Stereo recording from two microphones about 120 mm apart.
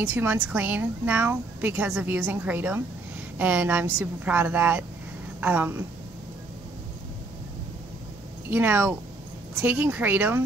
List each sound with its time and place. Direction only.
0.0 s speech: 10° right (ahead or behind)
8.5 s speech: 15° right (ahead or behind)